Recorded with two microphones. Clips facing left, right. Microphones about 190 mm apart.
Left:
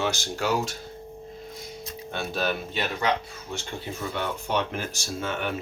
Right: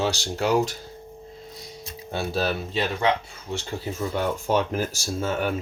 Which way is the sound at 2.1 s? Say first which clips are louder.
Right 3 dB; 35° right (ahead or behind).